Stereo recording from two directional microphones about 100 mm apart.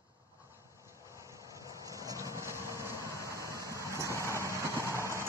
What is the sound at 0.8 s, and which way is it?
Vehicle, 30° right (ahead or behind).